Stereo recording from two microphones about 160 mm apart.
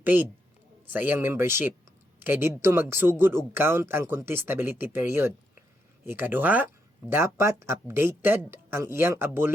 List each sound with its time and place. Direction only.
0.0 s a woman's voice: 10° right (ahead or behind)